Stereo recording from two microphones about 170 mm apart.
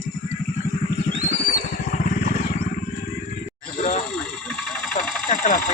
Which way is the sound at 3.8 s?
45° left (ahead or behind).